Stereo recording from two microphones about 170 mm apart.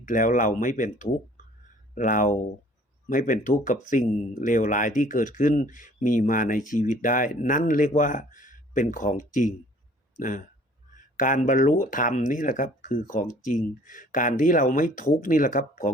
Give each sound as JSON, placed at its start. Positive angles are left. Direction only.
{"t": 0.0, "sound": "speech", "side_deg": 50}